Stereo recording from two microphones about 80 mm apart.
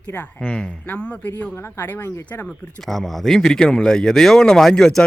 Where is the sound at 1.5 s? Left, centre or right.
Left.